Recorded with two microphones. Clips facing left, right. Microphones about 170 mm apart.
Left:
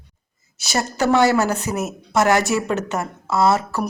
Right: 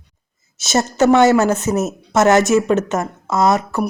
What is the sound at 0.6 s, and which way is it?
A woman's voice, 20° right (ahead or behind).